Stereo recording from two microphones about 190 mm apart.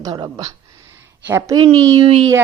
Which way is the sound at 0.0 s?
20° right (ahead or behind).